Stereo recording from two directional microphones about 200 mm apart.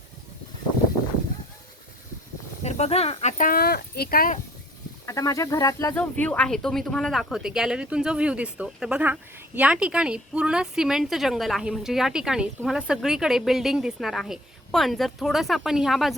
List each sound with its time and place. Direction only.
2.6 s speech: 30° left (ahead or behind); by 4.4 s 45° left (ahead or behind)
5.0 s a woman's voice: 15° left (ahead or behind); by 16.1 s centre (ahead or behind)